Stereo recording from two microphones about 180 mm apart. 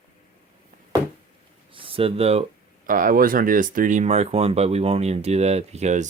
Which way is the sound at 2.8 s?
50° right (ahead or behind).